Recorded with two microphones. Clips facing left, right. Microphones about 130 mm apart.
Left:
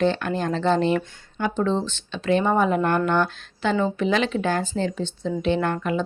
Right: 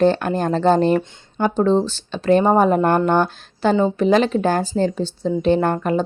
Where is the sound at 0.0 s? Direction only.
45° right (ahead or behind).